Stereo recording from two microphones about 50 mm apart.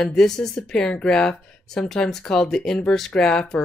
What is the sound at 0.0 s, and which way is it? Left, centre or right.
Speech, centre.